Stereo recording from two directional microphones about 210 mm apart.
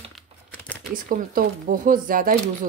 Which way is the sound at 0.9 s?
40° right (ahead or behind).